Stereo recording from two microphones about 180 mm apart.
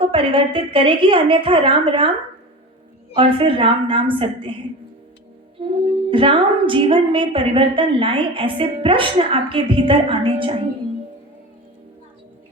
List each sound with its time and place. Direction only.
0.0 s speech: 30° right (ahead or behind)
3.2 s speech: 30° right (ahead or behind)
5.5 s speech: 30° right (ahead or behind)